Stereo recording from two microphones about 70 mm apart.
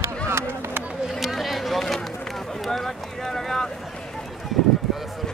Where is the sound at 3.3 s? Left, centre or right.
Centre.